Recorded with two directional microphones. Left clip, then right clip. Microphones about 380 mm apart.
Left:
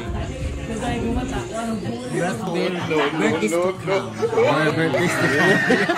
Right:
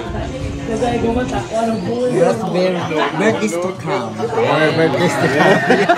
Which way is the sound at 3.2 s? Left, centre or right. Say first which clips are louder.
Right 4 dB; centre.